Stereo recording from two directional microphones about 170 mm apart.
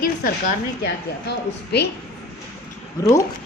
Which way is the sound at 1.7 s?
80° left.